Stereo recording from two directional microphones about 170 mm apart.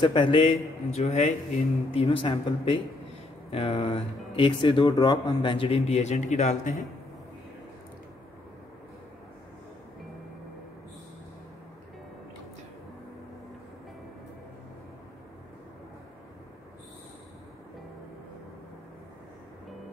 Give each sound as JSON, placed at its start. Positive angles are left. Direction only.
{"t": 0.0, "sound": "speech", "side_deg": 30}